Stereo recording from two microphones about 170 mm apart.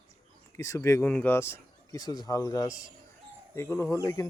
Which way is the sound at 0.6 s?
20° left (ahead or behind).